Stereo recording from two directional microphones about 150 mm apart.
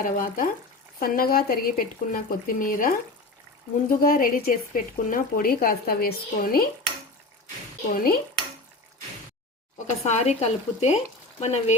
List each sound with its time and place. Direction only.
0.0 s speech: 65° left (ahead or behind)
7.9 s speech: 75° left (ahead or behind)
9.7 s speech: 50° left (ahead or behind)